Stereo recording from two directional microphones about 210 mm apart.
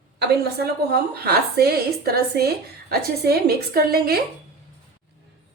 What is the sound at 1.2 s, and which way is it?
Speech, 50° right (ahead or behind).